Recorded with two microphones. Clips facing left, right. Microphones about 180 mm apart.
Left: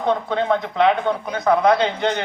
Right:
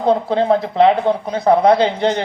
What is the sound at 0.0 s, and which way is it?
Speech, 30° right (ahead or behind).